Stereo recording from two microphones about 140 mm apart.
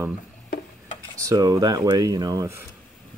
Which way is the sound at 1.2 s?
25° right (ahead or behind).